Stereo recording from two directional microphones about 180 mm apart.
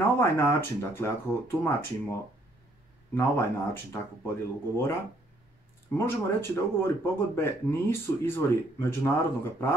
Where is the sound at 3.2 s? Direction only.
15° left (ahead or behind).